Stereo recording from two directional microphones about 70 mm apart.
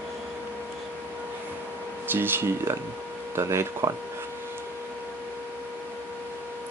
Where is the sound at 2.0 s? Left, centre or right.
Right.